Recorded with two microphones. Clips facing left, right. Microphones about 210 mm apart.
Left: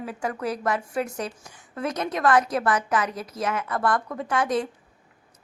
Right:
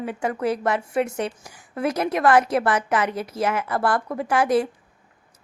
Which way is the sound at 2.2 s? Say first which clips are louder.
Right 3 dB; 30° right (ahead or behind).